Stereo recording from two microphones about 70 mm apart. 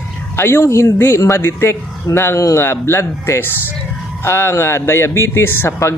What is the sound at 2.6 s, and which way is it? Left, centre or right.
A man's voice, left.